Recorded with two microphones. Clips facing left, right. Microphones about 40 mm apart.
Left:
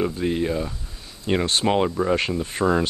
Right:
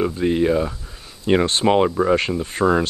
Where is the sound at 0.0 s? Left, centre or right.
Centre.